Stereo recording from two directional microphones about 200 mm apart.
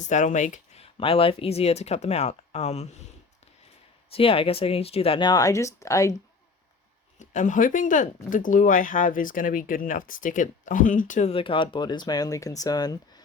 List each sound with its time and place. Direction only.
0.0 s speech: 35° left (ahead or behind)
4.1 s speech: 30° left (ahead or behind)
7.2 s speech: 40° left (ahead or behind); by 13.0 s 20° left (ahead or behind)